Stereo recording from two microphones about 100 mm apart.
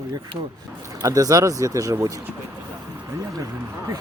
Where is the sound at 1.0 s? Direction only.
35° right (ahead or behind).